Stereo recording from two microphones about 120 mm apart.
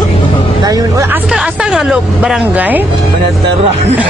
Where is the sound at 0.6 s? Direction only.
30° right (ahead or behind).